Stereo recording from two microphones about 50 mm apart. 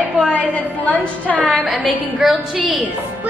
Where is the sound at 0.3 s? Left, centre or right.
Left.